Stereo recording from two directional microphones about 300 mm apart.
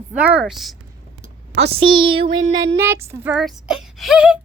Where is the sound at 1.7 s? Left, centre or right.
Centre.